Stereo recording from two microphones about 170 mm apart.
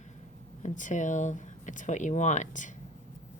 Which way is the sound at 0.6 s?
50° left (ahead or behind).